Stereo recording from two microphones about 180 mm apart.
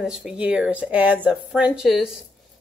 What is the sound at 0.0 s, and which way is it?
Speech, 5° right (ahead or behind).